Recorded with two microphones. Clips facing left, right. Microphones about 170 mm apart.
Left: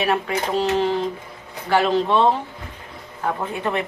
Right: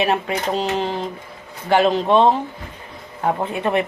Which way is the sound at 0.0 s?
20° right (ahead or behind).